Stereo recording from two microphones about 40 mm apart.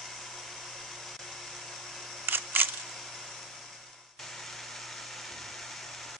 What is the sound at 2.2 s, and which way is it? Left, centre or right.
Single-lens reflex camera, right.